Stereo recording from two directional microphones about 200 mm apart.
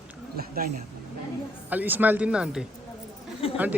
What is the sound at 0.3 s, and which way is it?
Speech, 45° right (ahead or behind).